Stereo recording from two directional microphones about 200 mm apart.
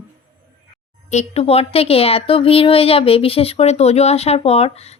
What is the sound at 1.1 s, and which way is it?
Speech, 35° left (ahead or behind).